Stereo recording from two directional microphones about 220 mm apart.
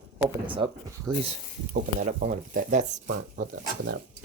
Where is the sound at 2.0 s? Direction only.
35° right (ahead or behind).